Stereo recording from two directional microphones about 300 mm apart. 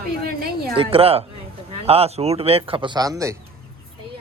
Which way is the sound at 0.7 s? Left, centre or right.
Centre.